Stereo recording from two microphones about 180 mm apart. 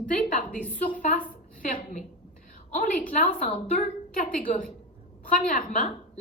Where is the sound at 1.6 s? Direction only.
50° left (ahead or behind).